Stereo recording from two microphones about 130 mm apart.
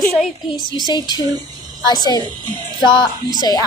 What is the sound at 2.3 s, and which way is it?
A child's voice, 35° right (ahead or behind).